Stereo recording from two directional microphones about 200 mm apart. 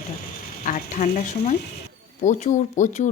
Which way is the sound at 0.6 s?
40° left (ahead or behind).